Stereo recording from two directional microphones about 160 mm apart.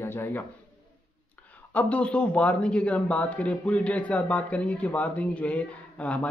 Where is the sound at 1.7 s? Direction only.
10° left (ahead or behind).